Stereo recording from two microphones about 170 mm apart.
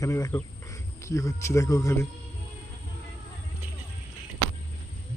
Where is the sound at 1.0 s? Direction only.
20° left (ahead or behind).